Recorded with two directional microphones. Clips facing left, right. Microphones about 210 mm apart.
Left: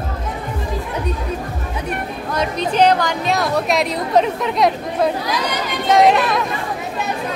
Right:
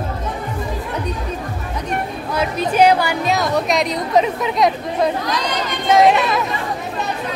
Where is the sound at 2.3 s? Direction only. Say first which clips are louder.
Right 1 dB; 5° right (ahead or behind).